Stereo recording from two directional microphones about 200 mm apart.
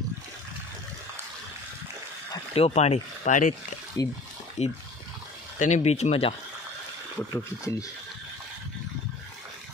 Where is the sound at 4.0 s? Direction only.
15° left (ahead or behind).